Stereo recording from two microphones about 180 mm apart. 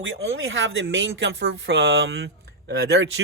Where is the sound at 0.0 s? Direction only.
90° right.